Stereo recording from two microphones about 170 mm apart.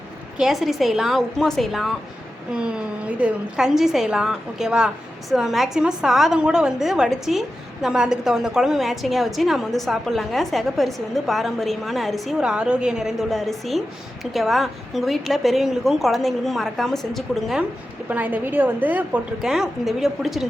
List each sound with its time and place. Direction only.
0.3 s a woman's voice: centre (ahead or behind)